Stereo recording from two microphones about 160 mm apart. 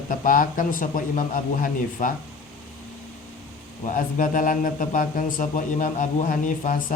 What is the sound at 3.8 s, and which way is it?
Speech, 55° left (ahead or behind).